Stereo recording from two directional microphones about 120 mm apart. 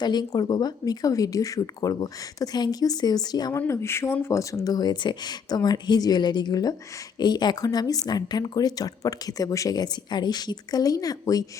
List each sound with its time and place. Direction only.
0.0 s speech: 35° left (ahead or behind)
3.7 s speech: 20° left (ahead or behind)